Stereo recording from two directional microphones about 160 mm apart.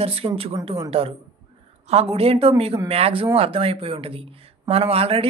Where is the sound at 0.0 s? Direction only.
35° right (ahead or behind).